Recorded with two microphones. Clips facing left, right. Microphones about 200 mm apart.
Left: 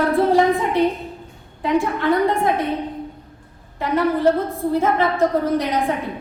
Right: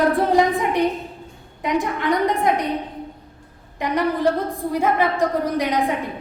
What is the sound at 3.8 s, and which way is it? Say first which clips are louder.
A woman's voice: left 2 dB; 15° right (ahead or behind).